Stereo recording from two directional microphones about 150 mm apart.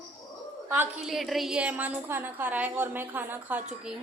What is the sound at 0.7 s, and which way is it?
Speech, 15° right (ahead or behind).